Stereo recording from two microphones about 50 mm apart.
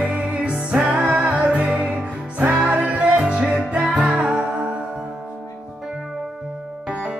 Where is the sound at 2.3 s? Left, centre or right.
Right.